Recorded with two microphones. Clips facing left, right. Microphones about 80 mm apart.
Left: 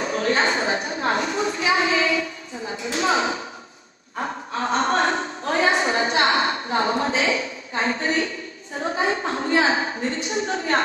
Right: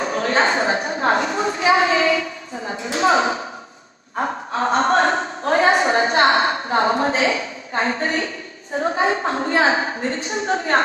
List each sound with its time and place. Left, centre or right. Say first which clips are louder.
0.0 s a woman's voice: right 3 dB; right
4.2 s a sound: right 5 dB; right
8.7 s a woman's voice: right 4 dB; right